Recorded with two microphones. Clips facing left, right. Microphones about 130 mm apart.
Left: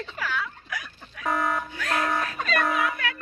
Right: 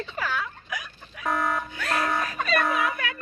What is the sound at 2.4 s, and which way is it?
Music, centre (ahead or behind).